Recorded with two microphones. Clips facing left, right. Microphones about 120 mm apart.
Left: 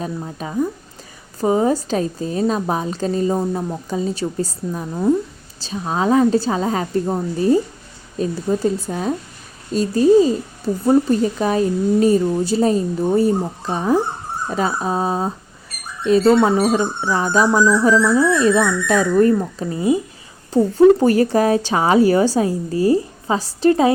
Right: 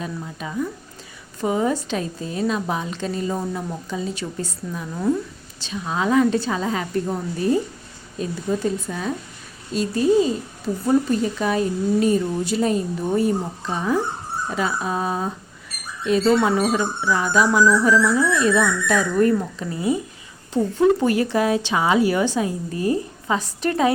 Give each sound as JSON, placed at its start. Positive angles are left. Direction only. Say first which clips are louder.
{"t": 0.0, "sound": "a woman's voice", "louder": "left 4 dB", "side_deg": 40}
{"t": 20.5, "sound": "a woman's voice", "louder": "left 6 dB", "side_deg": 40}